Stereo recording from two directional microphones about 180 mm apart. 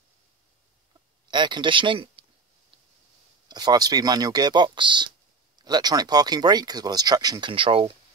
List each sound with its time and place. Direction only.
1.3 s speech: 25° right (ahead or behind)
3.4 s speech: 20° right (ahead or behind)